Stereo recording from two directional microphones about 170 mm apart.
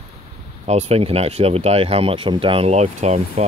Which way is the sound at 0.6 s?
40° right (ahead or behind).